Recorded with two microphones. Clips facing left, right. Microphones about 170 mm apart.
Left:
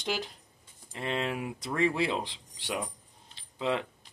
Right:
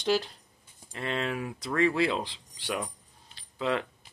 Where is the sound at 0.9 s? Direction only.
20° left (ahead or behind).